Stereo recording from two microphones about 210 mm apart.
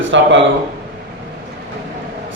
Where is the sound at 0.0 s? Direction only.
60° right (ahead or behind).